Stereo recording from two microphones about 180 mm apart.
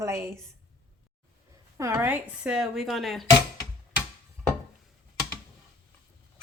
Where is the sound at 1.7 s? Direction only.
15° right (ahead or behind); by 3.3 s centre (ahead or behind).